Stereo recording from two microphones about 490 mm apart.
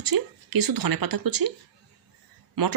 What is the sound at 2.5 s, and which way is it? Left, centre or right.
Speech, right.